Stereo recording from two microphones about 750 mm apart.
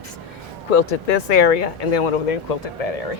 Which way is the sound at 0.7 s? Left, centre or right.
Left.